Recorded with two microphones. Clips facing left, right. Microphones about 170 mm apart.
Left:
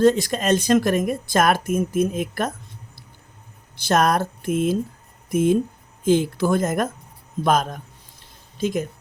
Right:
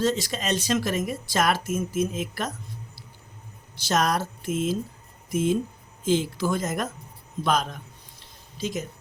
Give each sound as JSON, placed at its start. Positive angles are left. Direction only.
{"t": 0.0, "sound": "speech", "side_deg": 55}
{"t": 3.8, "sound": "speech", "side_deg": 55}